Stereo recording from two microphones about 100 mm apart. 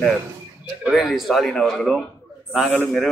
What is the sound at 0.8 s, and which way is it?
A man's voice, centre (ahead or behind).